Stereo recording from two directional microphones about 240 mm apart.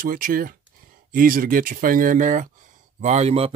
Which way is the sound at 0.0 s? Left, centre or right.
Right.